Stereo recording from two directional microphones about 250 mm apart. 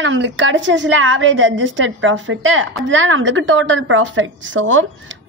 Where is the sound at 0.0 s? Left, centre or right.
Right.